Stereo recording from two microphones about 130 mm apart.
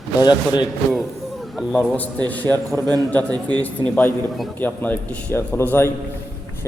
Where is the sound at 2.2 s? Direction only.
15° left (ahead or behind).